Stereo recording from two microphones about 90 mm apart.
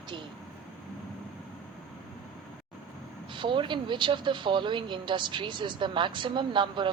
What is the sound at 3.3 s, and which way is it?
Speech, 65° right (ahead or behind).